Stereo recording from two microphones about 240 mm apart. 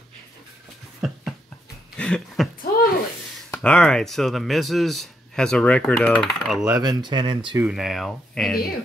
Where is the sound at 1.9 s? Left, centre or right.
Centre.